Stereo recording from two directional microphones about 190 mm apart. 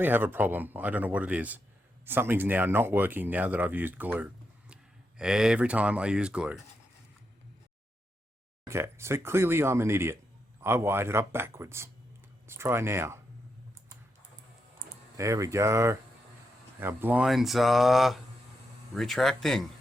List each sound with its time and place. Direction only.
0.0 s speech: 10° right (ahead or behind)
8.6 s speech: 15° right (ahead or behind)
15.1 s speech: 15° right (ahead or behind); by 19.6 s centre (ahead or behind)